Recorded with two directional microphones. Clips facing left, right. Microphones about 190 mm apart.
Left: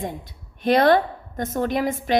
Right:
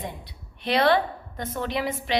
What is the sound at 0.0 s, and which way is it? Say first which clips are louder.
A woman's voice: left 5 dB; 45° left (ahead or behind).